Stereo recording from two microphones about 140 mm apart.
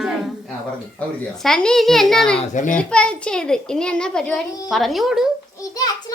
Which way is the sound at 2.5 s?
65° left (ahead or behind).